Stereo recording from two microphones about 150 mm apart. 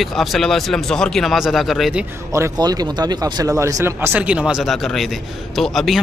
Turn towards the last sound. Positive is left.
turn(degrees=0)  # may be behind; listen again after turning